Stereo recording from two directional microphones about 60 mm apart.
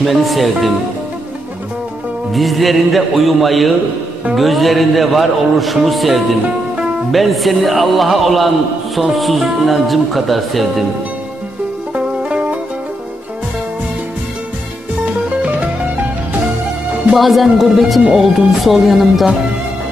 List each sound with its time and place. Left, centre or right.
0.0 s a man's voice: centre
2.3 s a man's voice: centre
12.3 s music: centre
17.1 s a man's voice: centre